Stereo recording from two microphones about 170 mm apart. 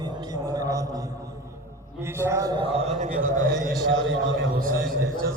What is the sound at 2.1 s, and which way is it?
Speech, 15° right (ahead or behind).